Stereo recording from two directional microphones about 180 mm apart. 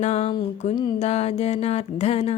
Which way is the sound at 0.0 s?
35° left (ahead or behind).